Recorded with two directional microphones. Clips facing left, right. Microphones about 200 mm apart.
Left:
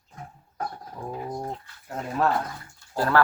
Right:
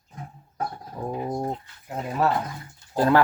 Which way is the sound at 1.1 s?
25° right (ahead or behind).